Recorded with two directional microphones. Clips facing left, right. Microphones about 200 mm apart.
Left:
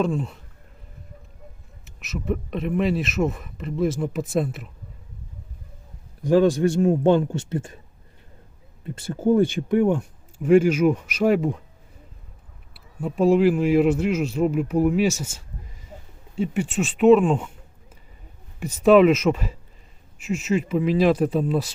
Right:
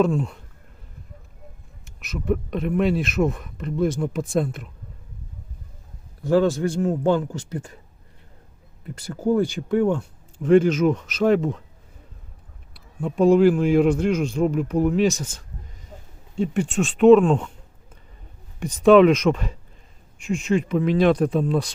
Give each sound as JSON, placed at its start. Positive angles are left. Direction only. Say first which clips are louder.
{"t": 0.0, "sound": "speech", "louder": "right 3 dB", "side_deg": 0}
{"t": 1.8, "sound": "speech", "louder": "even", "side_deg": 0}
{"t": 6.2, "sound": "a man's voice", "louder": "left 2 dB", "side_deg": 20}
{"t": 8.8, "sound": "speech", "louder": "left 2 dB", "side_deg": 20}
{"t": 12.7, "sound": "speech", "louder": "right 2 dB", "side_deg": 5}
{"t": 18.6, "sound": "speech", "louder": "right 1 dB", "side_deg": 5}